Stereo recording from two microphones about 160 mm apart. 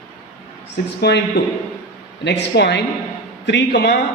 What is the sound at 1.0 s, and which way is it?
Speech, 90° left.